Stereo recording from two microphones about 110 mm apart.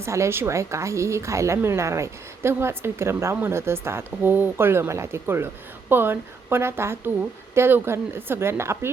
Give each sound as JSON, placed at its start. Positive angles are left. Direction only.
{"t": 0.0, "sound": "a woman's voice", "side_deg": -25}